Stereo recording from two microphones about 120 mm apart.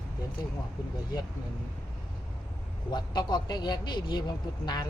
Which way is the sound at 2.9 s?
40° left (ahead or behind).